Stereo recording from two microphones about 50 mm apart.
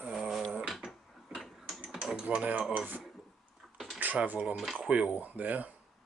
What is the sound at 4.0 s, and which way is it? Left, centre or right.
Speech, right.